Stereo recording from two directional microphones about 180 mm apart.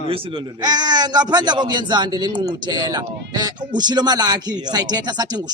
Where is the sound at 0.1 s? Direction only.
25° right (ahead or behind).